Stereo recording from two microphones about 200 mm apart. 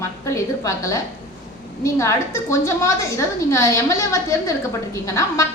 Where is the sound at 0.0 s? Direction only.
15° left (ahead or behind).